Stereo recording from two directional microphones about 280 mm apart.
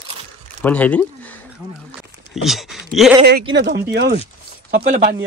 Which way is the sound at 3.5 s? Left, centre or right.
Right.